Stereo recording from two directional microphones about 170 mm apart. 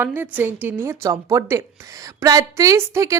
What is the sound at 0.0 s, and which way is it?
A woman's voice, 10° right (ahead or behind).